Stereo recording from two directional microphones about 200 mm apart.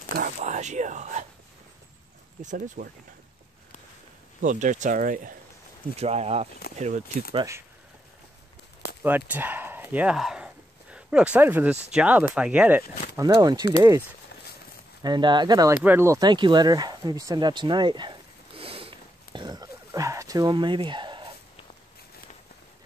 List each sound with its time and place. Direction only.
0.2 s speech: 40° right (ahead or behind)
2.4 s speech: 40° right (ahead or behind)
4.4 s speech: 40° right (ahead or behind)
5.9 s speech: 30° right (ahead or behind)
7.3 s speech: 15° right (ahead or behind)
9.3 s a sound: 10° right (ahead or behind)
11.9 s speech: 5° right (ahead or behind)
15.0 s a sound: 20° right (ahead or behind)